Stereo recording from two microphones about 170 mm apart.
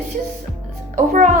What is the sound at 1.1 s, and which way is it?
Speech, 45° right (ahead or behind).